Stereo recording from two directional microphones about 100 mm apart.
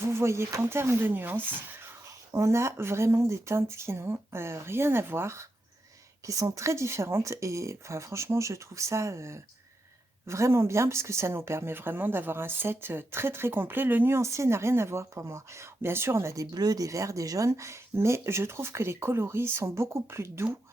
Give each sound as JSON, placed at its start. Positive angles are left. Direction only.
{"t": 0.0, "sound": "speech", "side_deg": -25}